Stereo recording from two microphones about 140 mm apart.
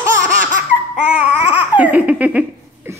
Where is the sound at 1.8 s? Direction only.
10° right (ahead or behind).